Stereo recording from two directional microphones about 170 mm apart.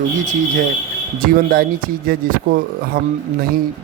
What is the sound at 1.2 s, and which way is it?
Speech, 55° right (ahead or behind).